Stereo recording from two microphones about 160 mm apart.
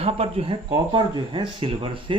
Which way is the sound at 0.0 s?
40° right (ahead or behind).